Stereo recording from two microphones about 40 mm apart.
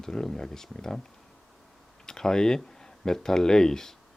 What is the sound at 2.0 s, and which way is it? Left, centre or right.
Speech, centre.